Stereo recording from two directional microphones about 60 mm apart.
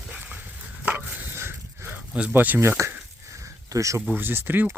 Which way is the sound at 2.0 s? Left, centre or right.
Right.